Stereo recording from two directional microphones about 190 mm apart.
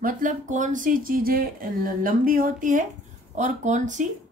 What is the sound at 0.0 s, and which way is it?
Speech, 45° right (ahead or behind).